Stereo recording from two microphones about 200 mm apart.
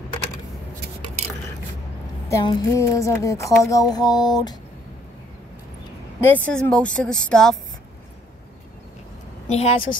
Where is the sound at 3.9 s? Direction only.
20° left (ahead or behind).